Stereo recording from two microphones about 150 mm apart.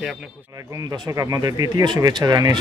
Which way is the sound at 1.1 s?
20° right (ahead or behind).